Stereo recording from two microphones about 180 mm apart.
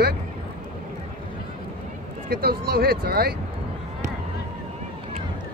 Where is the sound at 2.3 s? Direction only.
60° right (ahead or behind).